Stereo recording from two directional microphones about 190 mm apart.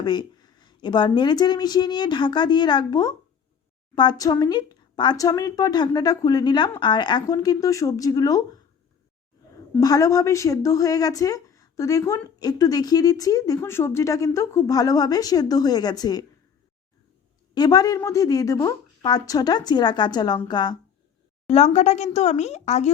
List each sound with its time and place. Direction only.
0.0 s speech: 25° left (ahead or behind)
9.8 s speech: 20° left (ahead or behind)
17.5 s speech: 20° left (ahead or behind)
21.5 s a woman's voice: 35° left (ahead or behind)